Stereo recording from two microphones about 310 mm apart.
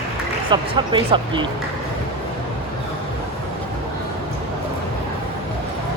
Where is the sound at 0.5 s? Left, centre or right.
Centre.